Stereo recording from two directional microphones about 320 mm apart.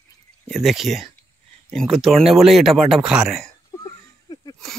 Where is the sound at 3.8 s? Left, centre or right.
Centre.